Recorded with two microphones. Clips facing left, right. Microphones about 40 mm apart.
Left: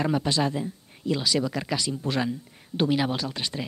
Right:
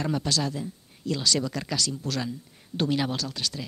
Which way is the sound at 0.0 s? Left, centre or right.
Centre.